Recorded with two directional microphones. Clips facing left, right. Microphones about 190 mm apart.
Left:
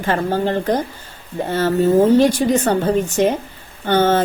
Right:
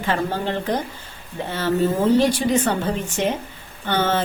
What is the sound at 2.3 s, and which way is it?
A woman's voice, 45° left (ahead or behind).